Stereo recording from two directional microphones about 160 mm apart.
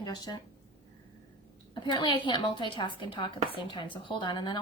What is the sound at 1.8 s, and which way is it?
A woman's voice, 30° left (ahead or behind).